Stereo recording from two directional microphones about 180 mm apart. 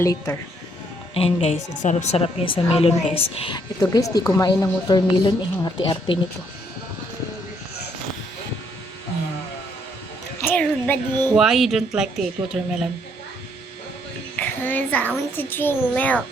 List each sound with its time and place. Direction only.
0.0 s a child's voice: 15° left (ahead or behind)
1.1 s a woman's voice: 30° left (ahead or behind)
10.4 s a sound: 10° left (ahead or behind)
11.3 s speech: centre (ahead or behind)
14.3 s a child's voice: 10° left (ahead or behind)